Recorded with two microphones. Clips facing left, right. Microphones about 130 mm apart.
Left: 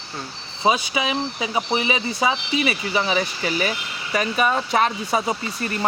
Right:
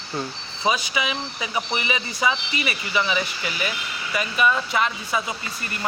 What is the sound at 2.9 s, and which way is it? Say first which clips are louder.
Speech: right 1 dB; 35° left (ahead or behind).